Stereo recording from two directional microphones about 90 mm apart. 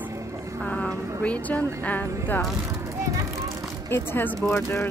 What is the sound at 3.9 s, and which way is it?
Speech, 25° left (ahead or behind).